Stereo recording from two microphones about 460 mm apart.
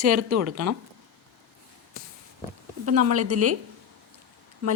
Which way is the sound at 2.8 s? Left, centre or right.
Right.